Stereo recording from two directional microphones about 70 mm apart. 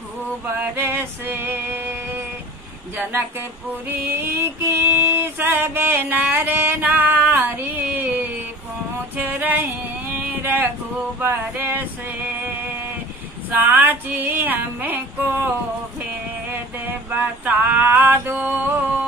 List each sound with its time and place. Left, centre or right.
0.7 s music: right
3.0 s speech: right
3.9 s a sound: right
11.1 s male singing: right
13.5 s female singing: right
16.4 s a sound: right
18.1 s female singing: right